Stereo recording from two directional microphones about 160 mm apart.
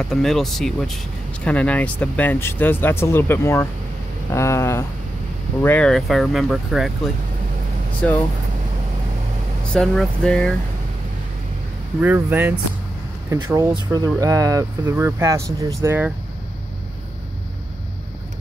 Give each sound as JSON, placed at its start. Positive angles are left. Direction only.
{"t": 0.0, "sound": "speech", "side_deg": 5}
{"t": 8.0, "sound": "speech", "side_deg": 10}
{"t": 9.7, "sound": "speech", "side_deg": 5}
{"t": 12.0, "sound": "speech", "side_deg": -10}